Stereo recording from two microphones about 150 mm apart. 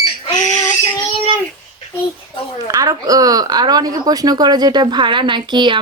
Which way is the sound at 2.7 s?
25° right (ahead or behind).